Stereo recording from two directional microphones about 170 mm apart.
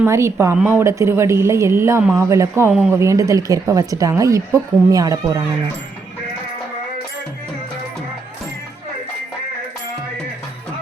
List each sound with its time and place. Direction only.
0.0 s a woman's voice: 15° right (ahead or behind)